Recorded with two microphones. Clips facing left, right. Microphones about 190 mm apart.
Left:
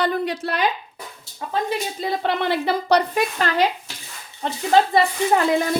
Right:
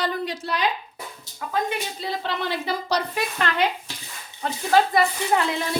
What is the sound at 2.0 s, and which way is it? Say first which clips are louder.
A woman's voice: left 5 dB; 55° left (ahead or behind).